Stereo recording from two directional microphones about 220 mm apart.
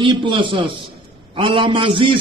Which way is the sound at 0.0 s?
20° right (ahead or behind).